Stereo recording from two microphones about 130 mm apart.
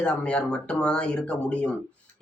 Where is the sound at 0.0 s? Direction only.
10° left (ahead or behind).